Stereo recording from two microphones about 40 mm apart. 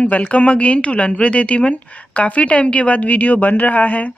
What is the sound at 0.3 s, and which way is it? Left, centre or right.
A woman's voice, left.